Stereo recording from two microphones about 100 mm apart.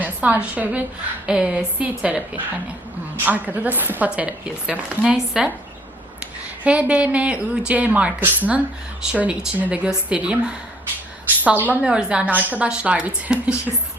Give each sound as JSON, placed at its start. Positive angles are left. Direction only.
{"t": 0.0, "sound": "a woman's voice", "side_deg": -15}
{"t": 6.7, "sound": "a woman's voice", "side_deg": -15}